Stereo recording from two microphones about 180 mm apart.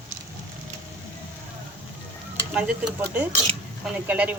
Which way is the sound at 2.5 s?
5° right (ahead or behind).